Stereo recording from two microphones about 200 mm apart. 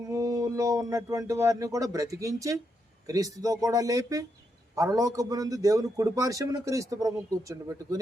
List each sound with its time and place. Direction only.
0.1 s a man's voice: 15° right (ahead or behind)